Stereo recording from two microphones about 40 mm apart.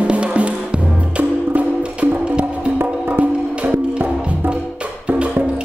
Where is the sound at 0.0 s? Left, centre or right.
Right.